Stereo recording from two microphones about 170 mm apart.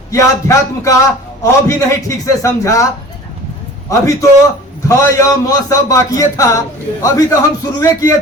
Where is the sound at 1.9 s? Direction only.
20° left (ahead or behind).